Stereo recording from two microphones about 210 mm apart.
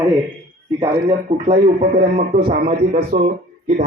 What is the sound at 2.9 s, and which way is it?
Speech, 30° right (ahead or behind).